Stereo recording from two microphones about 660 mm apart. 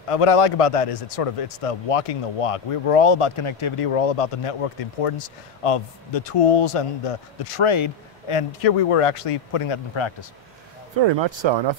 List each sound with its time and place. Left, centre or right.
0.1 s a man's voice: left
11.0 s speech: right